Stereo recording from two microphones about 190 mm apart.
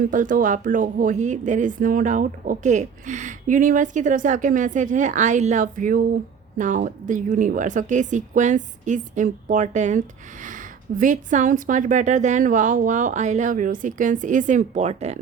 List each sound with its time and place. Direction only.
0.1 s a woman's voice: 45° right (ahead or behind)